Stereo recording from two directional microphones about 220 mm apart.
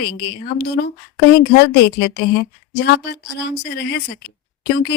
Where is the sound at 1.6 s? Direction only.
50° left (ahead or behind).